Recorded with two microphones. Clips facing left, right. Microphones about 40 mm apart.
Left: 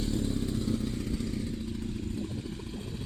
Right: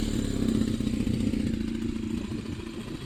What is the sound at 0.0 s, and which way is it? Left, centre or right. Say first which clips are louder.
Motorcycle: right 3 dB; right.